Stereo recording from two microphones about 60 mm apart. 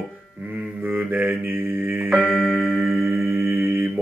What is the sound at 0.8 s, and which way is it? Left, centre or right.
Mantra, right.